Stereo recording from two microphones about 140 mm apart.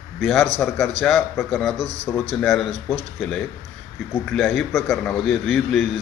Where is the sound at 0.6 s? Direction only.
10° left (ahead or behind).